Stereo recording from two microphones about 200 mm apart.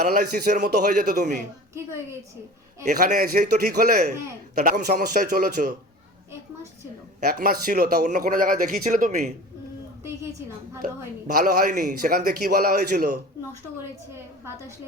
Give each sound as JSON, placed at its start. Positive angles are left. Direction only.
{"t": 0.0, "sound": "a man's voice", "side_deg": -50}
{"t": 2.8, "sound": "a man's voice", "side_deg": -40}
{"t": 7.3, "sound": "a man's voice", "side_deg": -50}
{"t": 10.0, "sound": "a woman's voice", "side_deg": -15}
{"t": 11.3, "sound": "a man's voice", "side_deg": -45}